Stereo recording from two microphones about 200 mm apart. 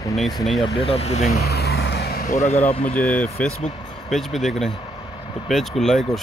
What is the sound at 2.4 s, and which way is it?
Speech, 30° left (ahead or behind).